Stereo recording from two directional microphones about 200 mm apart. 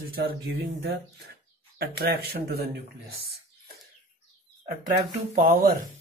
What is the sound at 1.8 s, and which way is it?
Speech, 50° right (ahead or behind).